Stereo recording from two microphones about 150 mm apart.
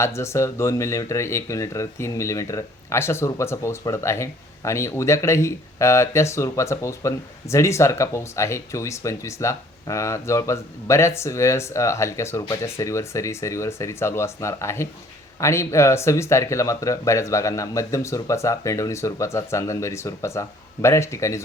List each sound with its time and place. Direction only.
0.0 s speech: 20° left (ahead or behind)